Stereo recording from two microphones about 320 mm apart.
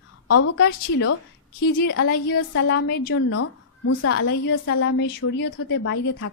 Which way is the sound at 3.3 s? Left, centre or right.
Left.